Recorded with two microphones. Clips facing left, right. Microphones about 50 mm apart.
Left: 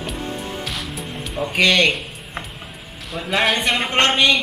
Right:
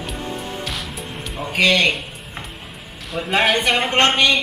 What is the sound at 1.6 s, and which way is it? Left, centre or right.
Speech, centre.